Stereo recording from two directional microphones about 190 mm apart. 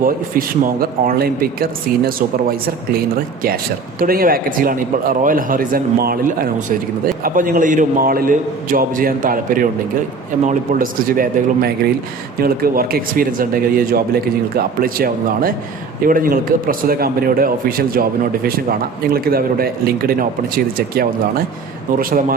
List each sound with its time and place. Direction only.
0.0 s a man's voice: 50° right (ahead or behind)
4.0 s a man's voice: 50° right (ahead or behind)